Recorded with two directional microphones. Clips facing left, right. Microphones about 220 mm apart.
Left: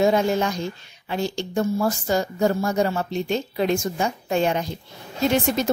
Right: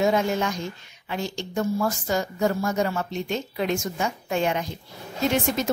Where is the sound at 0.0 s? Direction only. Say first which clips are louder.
Left 3 dB; 35° left (ahead or behind).